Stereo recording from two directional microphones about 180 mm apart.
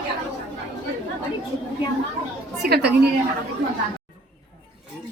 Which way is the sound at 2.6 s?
60° right (ahead or behind).